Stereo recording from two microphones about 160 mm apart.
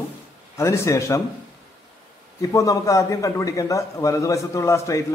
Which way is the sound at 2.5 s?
20° left (ahead or behind).